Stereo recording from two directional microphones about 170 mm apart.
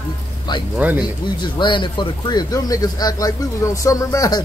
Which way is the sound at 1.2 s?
25° left (ahead or behind).